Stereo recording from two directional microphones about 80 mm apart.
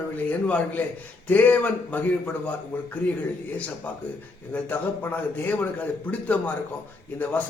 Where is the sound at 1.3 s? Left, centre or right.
Left.